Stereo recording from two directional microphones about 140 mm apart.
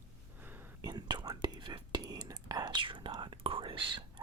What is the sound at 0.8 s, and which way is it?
Whispering, 30° right (ahead or behind).